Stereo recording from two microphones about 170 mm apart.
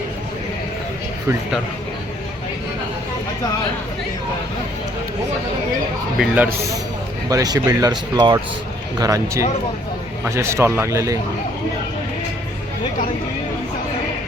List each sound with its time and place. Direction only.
6.1 s a man's voice: 10° right (ahead or behind)
7.3 s a man's voice: 20° right (ahead or behind)